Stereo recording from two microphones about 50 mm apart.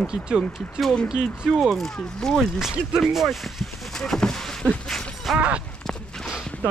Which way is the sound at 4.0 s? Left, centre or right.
Centre.